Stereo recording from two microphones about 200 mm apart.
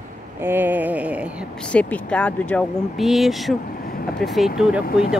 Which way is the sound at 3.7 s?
45° left (ahead or behind).